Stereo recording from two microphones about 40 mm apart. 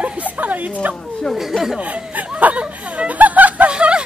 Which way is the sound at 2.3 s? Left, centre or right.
Right.